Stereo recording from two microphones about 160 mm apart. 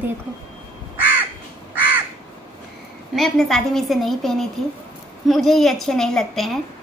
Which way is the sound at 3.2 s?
Centre (ahead or behind).